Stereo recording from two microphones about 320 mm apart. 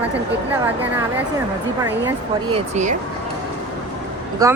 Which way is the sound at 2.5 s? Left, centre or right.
Right.